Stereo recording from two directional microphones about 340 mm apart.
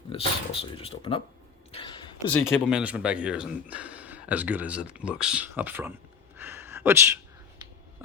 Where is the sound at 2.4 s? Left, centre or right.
Centre.